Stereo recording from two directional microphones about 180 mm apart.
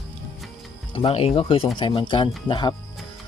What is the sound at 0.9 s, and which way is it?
Speech, 35° left (ahead or behind).